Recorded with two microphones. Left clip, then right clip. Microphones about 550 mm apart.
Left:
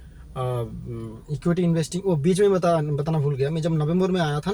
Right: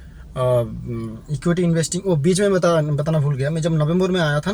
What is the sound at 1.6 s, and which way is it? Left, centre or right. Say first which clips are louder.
Speech: right 3 dB; left.